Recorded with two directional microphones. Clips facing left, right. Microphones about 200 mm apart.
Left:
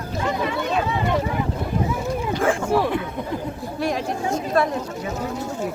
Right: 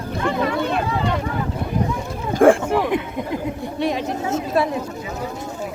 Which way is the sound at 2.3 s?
55° right (ahead or behind).